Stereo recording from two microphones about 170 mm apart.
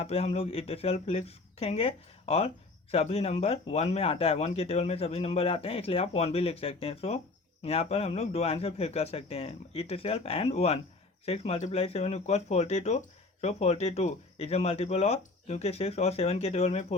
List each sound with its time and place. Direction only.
0.0 s speech: 35° left (ahead or behind)